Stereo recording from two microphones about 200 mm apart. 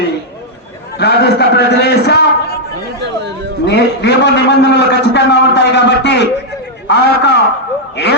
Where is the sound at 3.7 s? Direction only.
55° left (ahead or behind).